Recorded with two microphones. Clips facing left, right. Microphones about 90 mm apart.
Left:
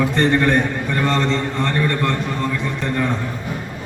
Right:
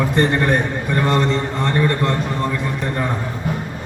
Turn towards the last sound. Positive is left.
turn(degrees=-15)  # may be behind; listen again after turning